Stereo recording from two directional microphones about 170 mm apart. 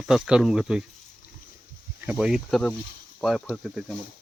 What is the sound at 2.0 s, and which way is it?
Speech, 5° right (ahead or behind).